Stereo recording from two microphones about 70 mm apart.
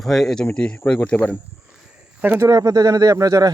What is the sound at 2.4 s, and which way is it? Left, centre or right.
Speech, right.